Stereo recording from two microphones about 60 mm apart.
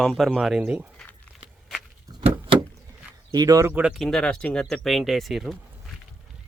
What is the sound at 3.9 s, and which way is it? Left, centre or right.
Speech, centre.